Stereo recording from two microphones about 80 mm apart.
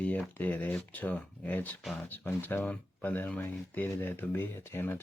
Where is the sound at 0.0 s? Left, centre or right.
Centre.